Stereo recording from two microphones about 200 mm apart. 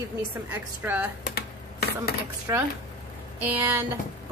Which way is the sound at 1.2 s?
50° left (ahead or behind).